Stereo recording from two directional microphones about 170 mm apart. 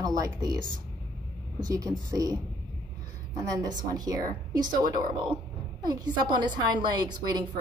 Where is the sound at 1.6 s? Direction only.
20° right (ahead or behind).